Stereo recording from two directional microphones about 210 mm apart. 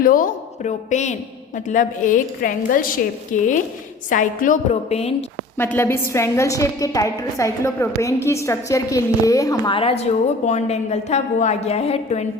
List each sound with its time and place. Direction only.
0.0 s a woman's voice: 40° left (ahead or behind)
5.5 s a woman's voice: 10° left (ahead or behind); by 12.2 s 30° left (ahead or behind)